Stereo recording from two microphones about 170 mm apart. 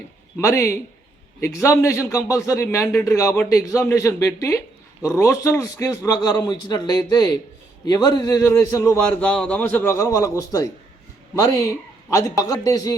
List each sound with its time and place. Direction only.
0.3 s a man's voice: 15° left (ahead or behind)
12.1 s speech: 20° left (ahead or behind)